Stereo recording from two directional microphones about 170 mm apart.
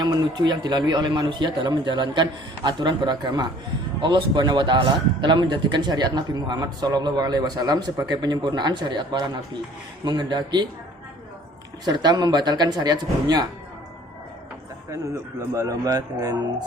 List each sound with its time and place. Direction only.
0.0 s a man's voice: 25° right (ahead or behind)
11.9 s a man's voice: 25° right (ahead or behind)
15.4 s a man's voice: 20° right (ahead or behind)